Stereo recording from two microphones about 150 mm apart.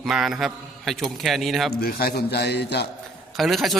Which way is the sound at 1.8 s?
90° left.